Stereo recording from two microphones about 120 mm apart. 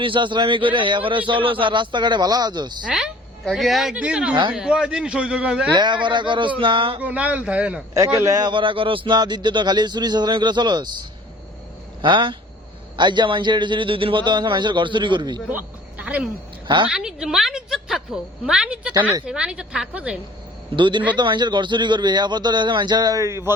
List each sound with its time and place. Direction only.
0.0 s a man's voice: 40° right (ahead or behind)
2.8 s a woman's voice: 5° right (ahead or behind)
5.7 s a man's voice: 40° right (ahead or behind)
7.0 s a man's voice: 10° right (ahead or behind)
7.9 s a man's voice: 25° right (ahead or behind)
12.0 s a man's voice: 40° right (ahead or behind)
15.4 s speech: 10° right (ahead or behind)
16.6 s a man's voice: 40° right (ahead or behind)
16.9 s a woman's voice: 5° right (ahead or behind)
20.7 s a man's voice: 40° right (ahead or behind); by 23.6 s 20° right (ahead or behind)